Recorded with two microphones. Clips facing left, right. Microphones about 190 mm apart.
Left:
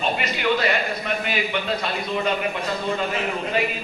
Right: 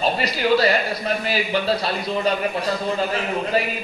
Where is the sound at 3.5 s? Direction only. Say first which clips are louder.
Right 1 dB; 35° right (ahead or behind).